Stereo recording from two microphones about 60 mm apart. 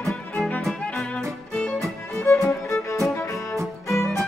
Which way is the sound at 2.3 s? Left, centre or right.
Left.